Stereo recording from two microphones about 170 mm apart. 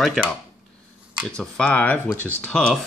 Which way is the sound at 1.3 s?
5° left (ahead or behind).